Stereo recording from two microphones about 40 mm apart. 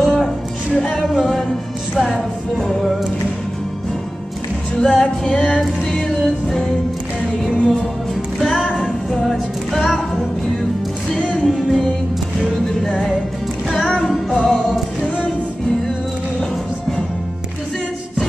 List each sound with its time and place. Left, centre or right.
0.0 s music: centre
2.0 s music: centre
4.7 s music: centre
5.2 s music: left
8.8 s music: centre
11.1 s music: left
11.5 s music: centre